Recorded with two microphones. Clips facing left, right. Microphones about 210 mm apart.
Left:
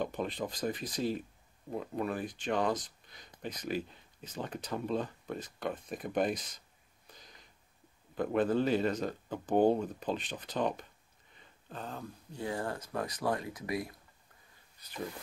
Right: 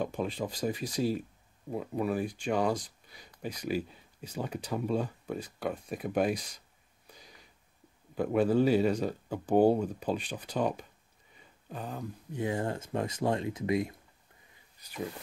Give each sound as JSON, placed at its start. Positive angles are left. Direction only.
{"t": 0.0, "sound": "speech", "side_deg": -5}
{"t": 7.1, "sound": "a sound", "side_deg": -5}
{"t": 8.1, "sound": "speech", "side_deg": -10}